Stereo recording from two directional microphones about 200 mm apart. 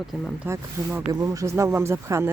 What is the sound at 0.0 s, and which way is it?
Speech, centre (ahead or behind).